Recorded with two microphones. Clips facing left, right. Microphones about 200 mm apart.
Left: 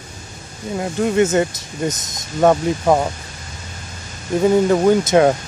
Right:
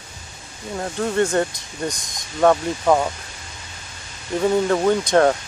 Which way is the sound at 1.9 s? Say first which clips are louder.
Left 5 dB; 20° left (ahead or behind).